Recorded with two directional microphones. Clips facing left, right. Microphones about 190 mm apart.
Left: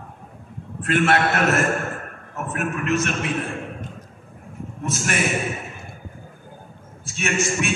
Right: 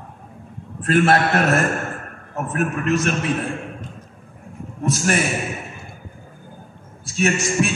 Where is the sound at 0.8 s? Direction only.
35° right (ahead or behind).